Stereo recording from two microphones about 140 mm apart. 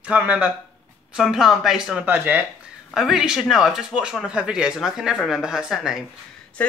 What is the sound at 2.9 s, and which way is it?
Speech, 5° right (ahead or behind).